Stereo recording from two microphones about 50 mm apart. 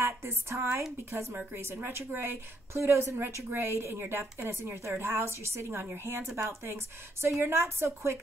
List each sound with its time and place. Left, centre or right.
0.0 s a woman's voice: right